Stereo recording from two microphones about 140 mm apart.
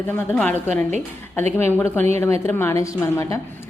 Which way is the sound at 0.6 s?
55° right (ahead or behind).